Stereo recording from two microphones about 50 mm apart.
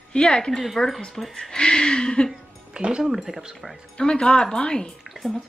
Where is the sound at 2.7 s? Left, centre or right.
Centre.